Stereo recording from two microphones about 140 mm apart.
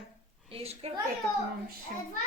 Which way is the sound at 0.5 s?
45° right (ahead or behind).